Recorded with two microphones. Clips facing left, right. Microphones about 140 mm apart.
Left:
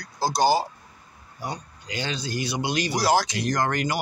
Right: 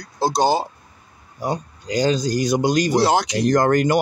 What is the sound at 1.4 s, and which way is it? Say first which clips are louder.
Speech: right 9 dB; 40° right (ahead or behind).